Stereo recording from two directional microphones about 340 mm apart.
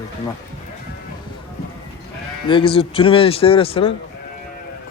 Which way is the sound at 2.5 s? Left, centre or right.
Centre.